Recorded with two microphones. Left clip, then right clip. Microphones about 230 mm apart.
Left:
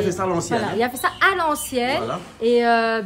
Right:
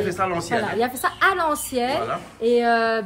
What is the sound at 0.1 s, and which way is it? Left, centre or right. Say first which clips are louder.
A woman's voice: left 1 dB; centre.